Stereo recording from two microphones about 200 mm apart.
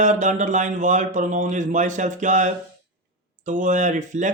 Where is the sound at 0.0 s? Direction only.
40° right (ahead or behind).